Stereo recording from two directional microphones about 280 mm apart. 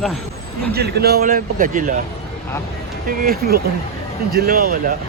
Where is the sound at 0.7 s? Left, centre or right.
Right.